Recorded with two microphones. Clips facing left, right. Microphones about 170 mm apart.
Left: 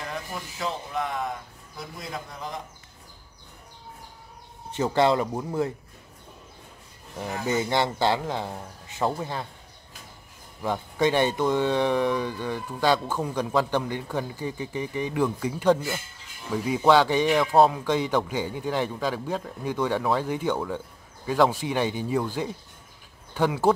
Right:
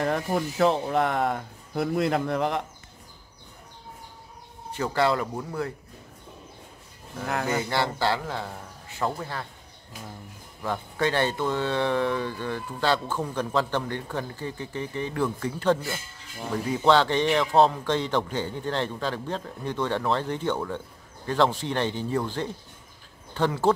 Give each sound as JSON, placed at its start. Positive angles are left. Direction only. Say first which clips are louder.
{"t": 0.0, "sound": "speech", "louder": "right 9 dB", "side_deg": -60}
{"t": 4.7, "sound": "speech", "louder": "left 3 dB", "side_deg": 20}
{"t": 7.2, "sound": "speech", "louder": "even", "side_deg": -65}
{"t": 7.7, "sound": "speech", "louder": "left 3 dB", "side_deg": 20}
{"t": 10.6, "sound": "speech", "louder": "left 3 dB", "side_deg": 15}